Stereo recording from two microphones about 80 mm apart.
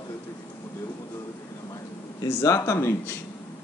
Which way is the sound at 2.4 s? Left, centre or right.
Left.